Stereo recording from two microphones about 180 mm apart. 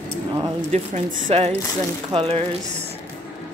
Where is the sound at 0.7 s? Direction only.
40° right (ahead or behind).